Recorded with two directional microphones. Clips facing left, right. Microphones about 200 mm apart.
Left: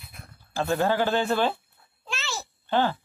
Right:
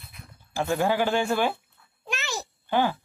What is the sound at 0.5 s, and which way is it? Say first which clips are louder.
Speech: even; 15° right (ahead or behind).